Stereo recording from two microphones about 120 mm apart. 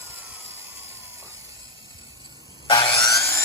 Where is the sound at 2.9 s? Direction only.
30° left (ahead or behind).